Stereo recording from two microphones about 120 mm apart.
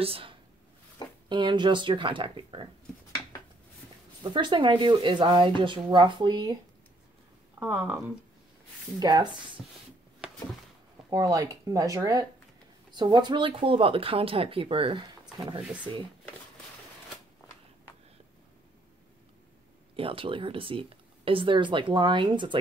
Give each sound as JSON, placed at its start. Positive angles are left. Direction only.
{"t": 0.0, "sound": "speech", "side_deg": -50}
{"t": 4.2, "sound": "speech", "side_deg": -40}
{"t": 7.5, "sound": "speech", "side_deg": -20}
{"t": 9.0, "sound": "speech", "side_deg": -35}
{"t": 11.1, "sound": "speech", "side_deg": -30}
{"t": 12.9, "sound": "speech", "side_deg": -40}
{"t": 20.0, "sound": "speech", "side_deg": -50}